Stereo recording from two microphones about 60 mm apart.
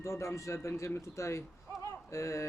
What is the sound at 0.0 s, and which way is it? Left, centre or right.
A man's voice, left.